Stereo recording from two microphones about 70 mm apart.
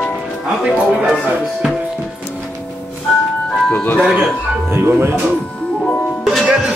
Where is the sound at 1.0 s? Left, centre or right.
Centre.